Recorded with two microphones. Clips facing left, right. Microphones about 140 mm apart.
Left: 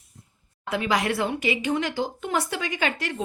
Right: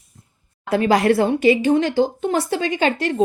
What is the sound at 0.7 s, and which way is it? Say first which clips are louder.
Speech: right 9 dB; 35° right (ahead or behind).